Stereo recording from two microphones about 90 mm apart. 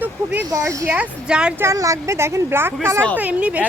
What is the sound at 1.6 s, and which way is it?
Speech, 35° right (ahead or behind).